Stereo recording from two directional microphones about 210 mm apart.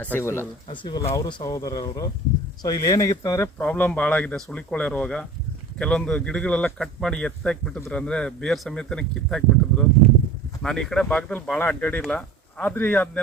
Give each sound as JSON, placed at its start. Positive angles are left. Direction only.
{"t": 0.2, "sound": "speech", "side_deg": 10}